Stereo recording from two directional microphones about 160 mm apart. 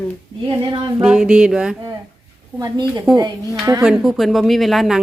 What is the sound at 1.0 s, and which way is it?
Speech, 5° right (ahead or behind).